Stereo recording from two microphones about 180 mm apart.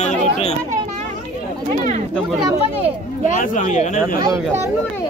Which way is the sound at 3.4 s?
45° left (ahead or behind).